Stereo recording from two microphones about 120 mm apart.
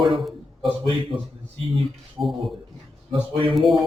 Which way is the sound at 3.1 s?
50° right (ahead or behind).